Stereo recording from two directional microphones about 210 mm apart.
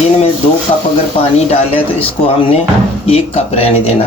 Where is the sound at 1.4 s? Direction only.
30° left (ahead or behind).